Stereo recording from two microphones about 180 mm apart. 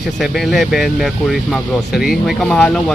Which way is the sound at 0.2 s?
Centre (ahead or behind).